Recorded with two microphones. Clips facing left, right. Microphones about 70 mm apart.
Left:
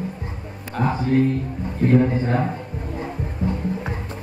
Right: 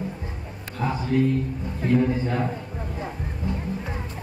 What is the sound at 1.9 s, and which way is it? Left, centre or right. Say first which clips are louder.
Speech: left 3 dB; left.